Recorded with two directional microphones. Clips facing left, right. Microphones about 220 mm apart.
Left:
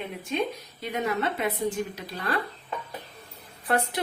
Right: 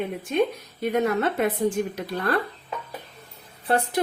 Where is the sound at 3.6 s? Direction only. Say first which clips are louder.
Right 3 dB; 30° right (ahead or behind).